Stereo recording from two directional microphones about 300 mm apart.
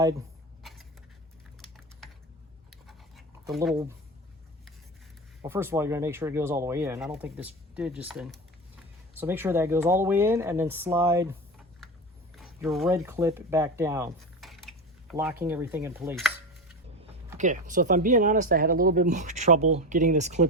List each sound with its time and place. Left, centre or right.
0.6 s a sound: centre
2.6 s a sound: centre
3.5 s speech: centre
5.4 s speech: centre
12.4 s speech: centre
17.3 s speech: right